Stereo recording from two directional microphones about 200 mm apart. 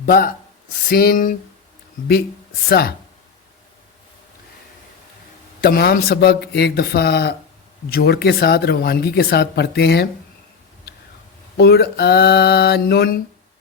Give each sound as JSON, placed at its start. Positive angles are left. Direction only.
{"t": 0.0, "sound": "speech", "side_deg": 45}
{"t": 2.6, "sound": "speech", "side_deg": 50}
{"t": 5.6, "sound": "speech", "side_deg": 50}
{"t": 11.5, "sound": "speech", "side_deg": 55}